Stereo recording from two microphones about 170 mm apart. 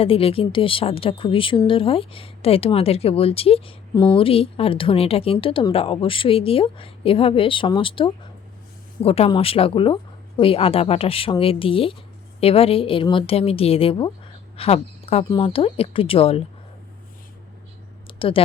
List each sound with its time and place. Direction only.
0.0 s a woman's voice: 35° left (ahead or behind)
18.2 s speech: 30° left (ahead or behind)